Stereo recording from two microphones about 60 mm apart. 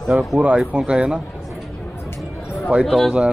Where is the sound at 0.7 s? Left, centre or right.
Centre.